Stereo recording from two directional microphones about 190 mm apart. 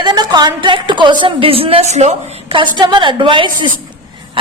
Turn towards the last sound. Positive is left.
turn(degrees=-25)  # may be behind; listen again after turning